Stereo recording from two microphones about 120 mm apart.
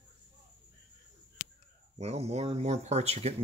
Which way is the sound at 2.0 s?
65° right (ahead or behind).